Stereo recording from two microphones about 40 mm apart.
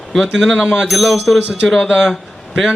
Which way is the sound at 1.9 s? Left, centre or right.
Centre.